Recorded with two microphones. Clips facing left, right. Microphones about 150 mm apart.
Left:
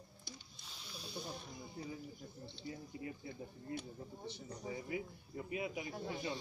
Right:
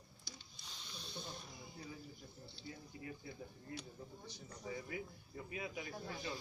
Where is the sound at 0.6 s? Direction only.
5° left (ahead or behind).